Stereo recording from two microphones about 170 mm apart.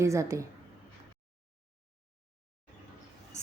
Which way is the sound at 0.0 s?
15° right (ahead or behind).